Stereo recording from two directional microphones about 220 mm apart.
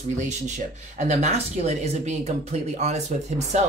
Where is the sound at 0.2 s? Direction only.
35° right (ahead or behind).